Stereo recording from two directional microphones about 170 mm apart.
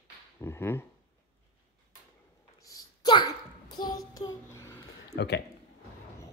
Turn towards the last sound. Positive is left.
turn(degrees=80)